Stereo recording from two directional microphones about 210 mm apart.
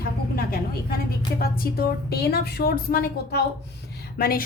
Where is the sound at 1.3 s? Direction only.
45° left (ahead or behind).